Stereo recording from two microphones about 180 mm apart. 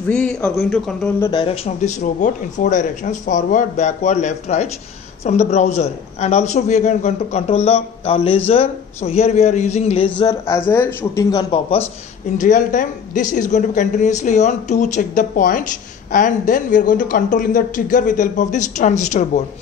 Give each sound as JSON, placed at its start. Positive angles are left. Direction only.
{"t": 0.1, "sound": "a man's voice", "side_deg": 5}
{"t": 1.2, "sound": "speech", "side_deg": 25}
{"t": 10.4, "sound": "speech", "side_deg": 15}
{"t": 11.2, "sound": "a man's voice", "side_deg": 25}
{"t": 12.4, "sound": "a woman's voice", "side_deg": 45}